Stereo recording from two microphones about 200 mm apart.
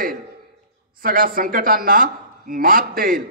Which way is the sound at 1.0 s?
45° right (ahead or behind).